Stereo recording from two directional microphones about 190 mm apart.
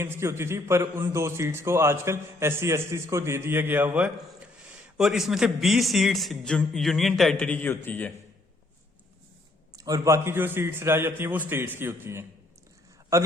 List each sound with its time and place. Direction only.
0.0 s a man's voice: 15° right (ahead or behind); by 8.1 s 10° left (ahead or behind)
9.7 s a man's voice: 20° right (ahead or behind)